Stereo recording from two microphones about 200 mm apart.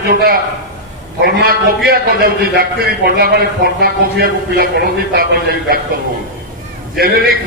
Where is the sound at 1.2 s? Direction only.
50° right (ahead or behind).